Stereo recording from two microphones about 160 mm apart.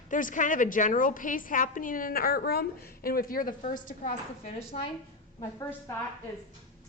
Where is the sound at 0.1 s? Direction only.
55° left (ahead or behind).